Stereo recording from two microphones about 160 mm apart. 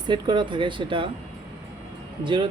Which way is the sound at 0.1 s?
30° right (ahead or behind).